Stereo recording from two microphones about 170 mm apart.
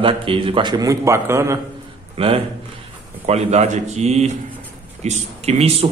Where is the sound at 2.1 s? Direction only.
35° right (ahead or behind).